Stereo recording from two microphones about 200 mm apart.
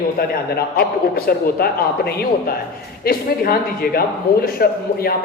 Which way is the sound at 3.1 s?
45° left (ahead or behind).